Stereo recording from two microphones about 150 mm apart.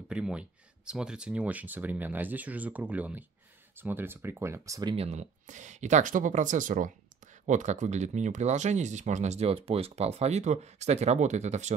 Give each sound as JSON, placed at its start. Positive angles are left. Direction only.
{"t": 0.1, "sound": "speech", "side_deg": -5}
{"t": 4.9, "sound": "speech", "side_deg": -45}